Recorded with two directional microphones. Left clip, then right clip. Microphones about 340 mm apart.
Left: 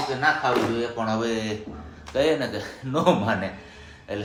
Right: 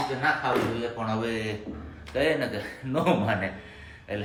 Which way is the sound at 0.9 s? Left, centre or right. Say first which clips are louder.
Left 4 dB; centre.